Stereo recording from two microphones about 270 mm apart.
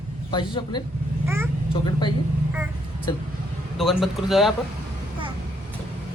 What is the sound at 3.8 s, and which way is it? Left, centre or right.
Speech, centre.